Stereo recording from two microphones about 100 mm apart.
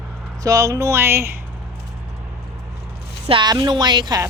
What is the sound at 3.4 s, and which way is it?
Speech, 45° right (ahead or behind).